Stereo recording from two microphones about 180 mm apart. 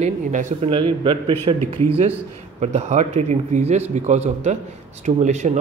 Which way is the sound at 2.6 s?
40° right (ahead or behind).